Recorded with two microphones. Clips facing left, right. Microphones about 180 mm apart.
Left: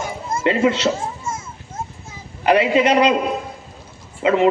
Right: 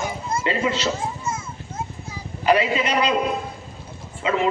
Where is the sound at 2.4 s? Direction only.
70° left (ahead or behind).